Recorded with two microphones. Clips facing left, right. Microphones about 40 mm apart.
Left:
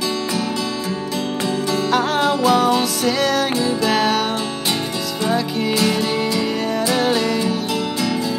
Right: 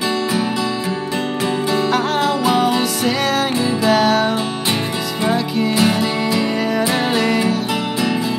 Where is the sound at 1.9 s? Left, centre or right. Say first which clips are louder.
Even; centre.